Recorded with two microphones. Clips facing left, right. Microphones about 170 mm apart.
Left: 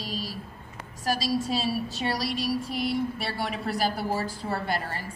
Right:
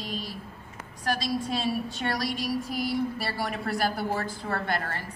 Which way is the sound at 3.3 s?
Centre (ahead or behind).